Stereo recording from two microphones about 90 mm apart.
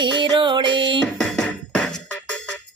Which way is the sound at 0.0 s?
60° right (ahead or behind).